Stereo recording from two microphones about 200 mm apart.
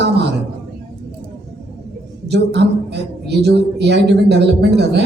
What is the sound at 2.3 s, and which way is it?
A woman's voice, 55° right (ahead or behind).